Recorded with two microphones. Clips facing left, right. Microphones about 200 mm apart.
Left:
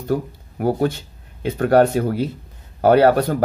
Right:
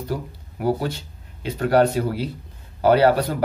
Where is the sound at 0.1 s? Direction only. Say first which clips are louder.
Left 11 dB; 50° left (ahead or behind).